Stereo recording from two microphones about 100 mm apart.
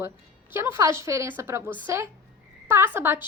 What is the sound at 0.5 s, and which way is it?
Speech, 25° right (ahead or behind).